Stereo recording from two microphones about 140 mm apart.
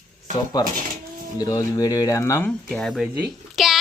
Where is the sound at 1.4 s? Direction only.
25° left (ahead or behind).